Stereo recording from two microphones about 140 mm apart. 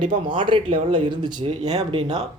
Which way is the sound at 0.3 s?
35° right (ahead or behind).